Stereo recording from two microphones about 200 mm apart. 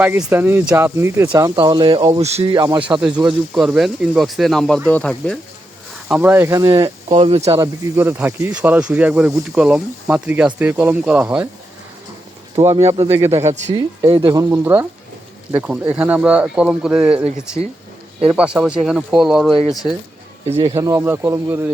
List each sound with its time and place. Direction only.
0.0 s speech: 5° right (ahead or behind)
3.0 s speech: 5° right (ahead or behind)
6.1 s speech: 10° right (ahead or behind)
7.1 s speech: 30° right (ahead or behind)
7.6 s speech: 10° right (ahead or behind)
12.6 s speech: 15° right (ahead or behind)
12.9 s speech: 30° right (ahead or behind)
13.2 s speech: 15° right (ahead or behind)
18.3 s speech: 5° right (ahead or behind)
20.6 s speech: 20° right (ahead or behind)